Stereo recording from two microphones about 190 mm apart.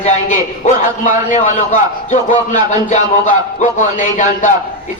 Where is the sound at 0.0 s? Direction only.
40° left (ahead or behind).